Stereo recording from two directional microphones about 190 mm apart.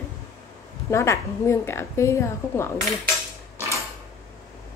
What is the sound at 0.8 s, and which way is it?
A woman's voice, 15° left (ahead or behind).